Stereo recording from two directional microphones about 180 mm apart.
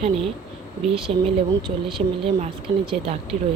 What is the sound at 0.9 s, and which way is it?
Speech, 30° right (ahead or behind).